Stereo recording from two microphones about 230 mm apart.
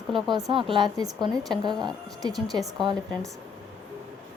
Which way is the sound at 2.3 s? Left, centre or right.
Centre.